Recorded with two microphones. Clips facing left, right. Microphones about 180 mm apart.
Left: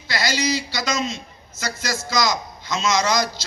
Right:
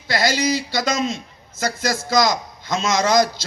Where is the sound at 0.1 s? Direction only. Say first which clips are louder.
Right 3 dB; 50° right (ahead or behind).